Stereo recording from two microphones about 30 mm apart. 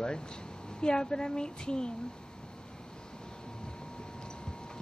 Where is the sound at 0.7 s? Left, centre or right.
Left.